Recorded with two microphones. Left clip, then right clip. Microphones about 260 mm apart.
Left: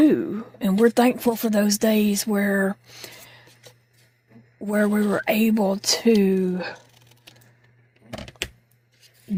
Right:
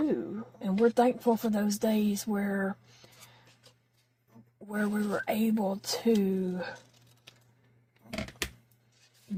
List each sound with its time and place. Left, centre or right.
0.1 s a woman's voice: left
4.6 s a woman's voice: left